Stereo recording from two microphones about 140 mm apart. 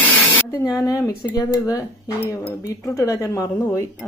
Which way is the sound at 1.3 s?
25° left (ahead or behind).